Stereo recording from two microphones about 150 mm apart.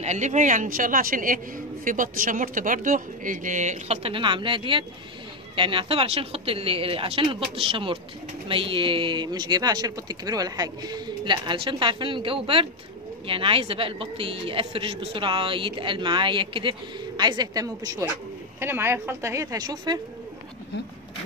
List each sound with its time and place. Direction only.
0.0 s a woman's voice: 50° right (ahead or behind); by 20.0 s 25° right (ahead or behind)